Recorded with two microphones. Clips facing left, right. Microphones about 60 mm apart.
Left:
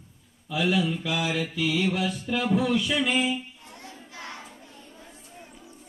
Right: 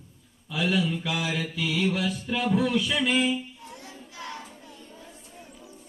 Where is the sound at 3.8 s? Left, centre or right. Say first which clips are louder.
Left 2 dB; left.